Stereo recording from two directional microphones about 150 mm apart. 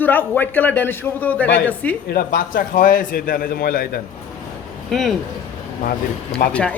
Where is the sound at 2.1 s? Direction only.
70° left (ahead or behind).